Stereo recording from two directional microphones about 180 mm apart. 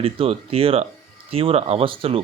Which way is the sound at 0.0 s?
30° right (ahead or behind).